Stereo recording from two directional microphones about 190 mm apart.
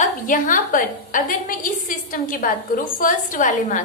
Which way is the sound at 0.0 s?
45° left (ahead or behind).